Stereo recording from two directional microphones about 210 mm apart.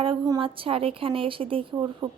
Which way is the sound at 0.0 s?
25° right (ahead or behind).